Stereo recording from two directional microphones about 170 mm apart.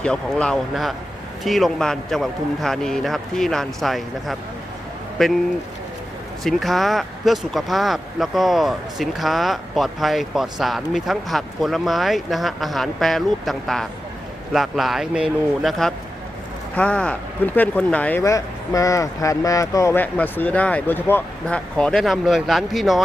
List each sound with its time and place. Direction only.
0.0 s speech: 5° left (ahead or behind)
6.4 s speech: centre (ahead or behind)
18.2 s speech: 20° left (ahead or behind); by 23.0 s centre (ahead or behind)